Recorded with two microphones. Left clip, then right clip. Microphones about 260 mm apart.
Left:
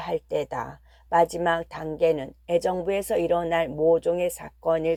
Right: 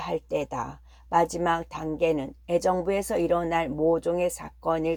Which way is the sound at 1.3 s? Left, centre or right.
Left.